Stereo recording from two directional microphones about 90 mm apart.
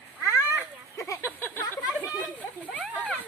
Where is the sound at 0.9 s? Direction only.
35° left (ahead or behind).